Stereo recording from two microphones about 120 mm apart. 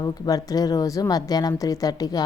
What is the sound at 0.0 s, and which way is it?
A woman's voice, 30° left (ahead or behind).